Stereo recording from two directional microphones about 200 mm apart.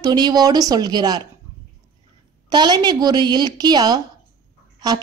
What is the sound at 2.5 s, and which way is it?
A woman's voice, 20° right (ahead or behind).